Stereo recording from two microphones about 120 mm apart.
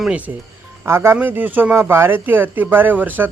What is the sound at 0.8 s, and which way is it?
A man's voice, 20° right (ahead or behind).